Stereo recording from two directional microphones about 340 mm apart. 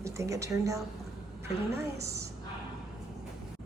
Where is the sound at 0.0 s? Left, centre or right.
Centre.